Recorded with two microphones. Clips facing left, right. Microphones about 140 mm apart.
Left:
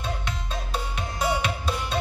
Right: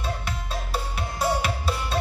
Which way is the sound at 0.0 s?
5° right (ahead or behind).